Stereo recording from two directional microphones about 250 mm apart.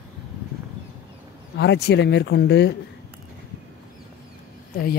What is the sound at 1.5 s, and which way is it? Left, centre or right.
Speech, left.